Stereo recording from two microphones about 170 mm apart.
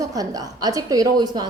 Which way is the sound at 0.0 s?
20° right (ahead or behind).